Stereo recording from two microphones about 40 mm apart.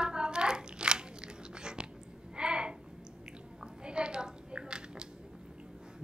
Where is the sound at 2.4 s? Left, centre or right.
Right.